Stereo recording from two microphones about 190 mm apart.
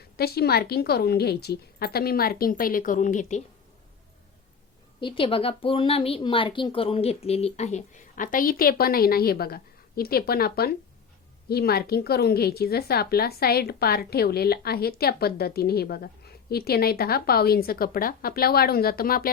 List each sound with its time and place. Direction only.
0.2 s a woman's voice: 55° left (ahead or behind); by 3.4 s 40° left (ahead or behind)
4.9 s a woman's voice: 25° left (ahead or behind); by 19.3 s 50° left (ahead or behind)